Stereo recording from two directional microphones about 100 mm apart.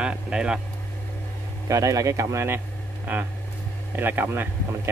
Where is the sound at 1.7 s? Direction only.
35° right (ahead or behind).